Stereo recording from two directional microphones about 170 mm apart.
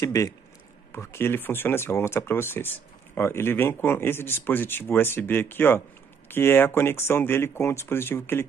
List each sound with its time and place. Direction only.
0.0 s speech: 20° left (ahead or behind)